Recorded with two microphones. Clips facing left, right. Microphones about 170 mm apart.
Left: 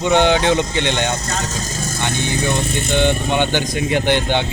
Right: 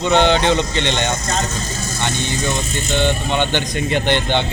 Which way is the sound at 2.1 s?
55° left (ahead or behind).